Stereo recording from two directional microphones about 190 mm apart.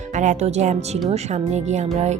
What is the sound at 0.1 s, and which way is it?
A woman's voice, 40° right (ahead or behind).